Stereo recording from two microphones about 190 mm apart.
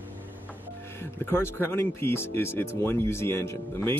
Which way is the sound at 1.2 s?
10° left (ahead or behind).